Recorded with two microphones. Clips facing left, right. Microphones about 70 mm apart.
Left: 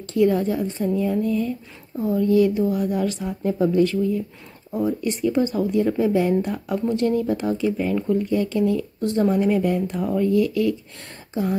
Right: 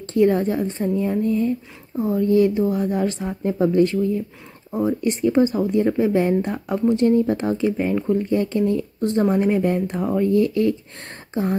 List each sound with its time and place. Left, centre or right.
0.0 s speech: right
5.2 s speech: right